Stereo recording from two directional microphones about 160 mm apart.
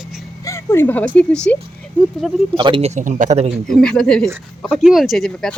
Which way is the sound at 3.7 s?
5° left (ahead or behind).